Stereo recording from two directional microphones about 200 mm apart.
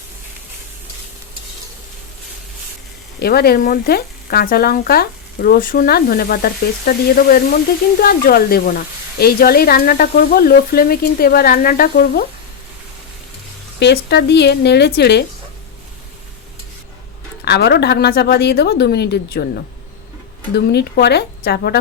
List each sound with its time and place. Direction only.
3.2 s speech: 50° left (ahead or behind)
13.7 s a woman's voice: 55° left (ahead or behind)
17.4 s a woman's voice: 55° left (ahead or behind)